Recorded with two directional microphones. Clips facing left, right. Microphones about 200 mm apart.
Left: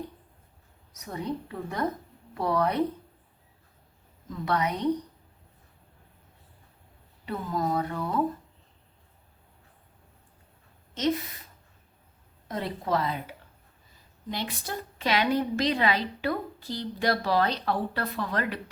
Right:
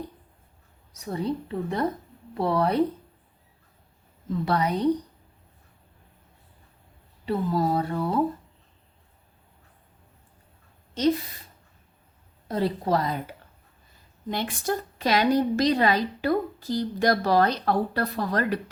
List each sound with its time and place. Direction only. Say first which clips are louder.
0.9 s speech: right 4 dB; 30° right (ahead or behind)
4.3 s a woman's voice: right 3 dB; 30° right (ahead or behind)
7.3 s speech: right 5 dB; 30° right (ahead or behind)
12.5 s a woman's voice: right 5 dB; 35° right (ahead or behind)
14.3 s a woman's voice: right 6 dB; 50° right (ahead or behind)